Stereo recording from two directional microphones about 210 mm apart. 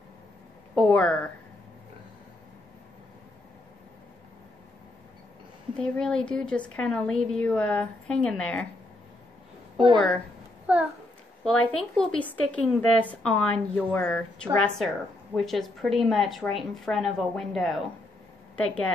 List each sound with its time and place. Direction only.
0.7 s a woman's voice: 5° left (ahead or behind)
5.8 s speech: 5° left (ahead or behind)
9.9 s speech: 5° left (ahead or behind)
10.7 s a child's voice: 5° right (ahead or behind)
11.4 s a woman's voice: 5° left (ahead or behind)